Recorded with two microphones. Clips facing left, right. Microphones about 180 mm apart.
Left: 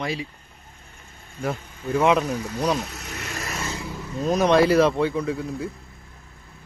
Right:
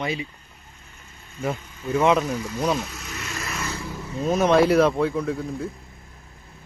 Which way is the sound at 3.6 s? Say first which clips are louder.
Even; 20° left (ahead or behind).